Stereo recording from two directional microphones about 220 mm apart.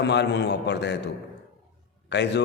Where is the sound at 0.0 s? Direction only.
50° left (ahead or behind).